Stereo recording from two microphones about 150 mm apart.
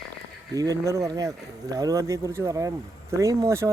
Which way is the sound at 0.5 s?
25° right (ahead or behind).